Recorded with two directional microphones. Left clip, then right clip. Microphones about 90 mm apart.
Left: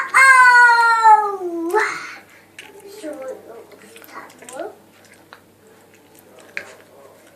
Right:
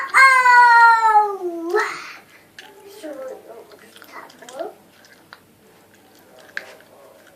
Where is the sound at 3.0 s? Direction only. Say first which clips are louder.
Left 2 dB; 10° right (ahead or behind).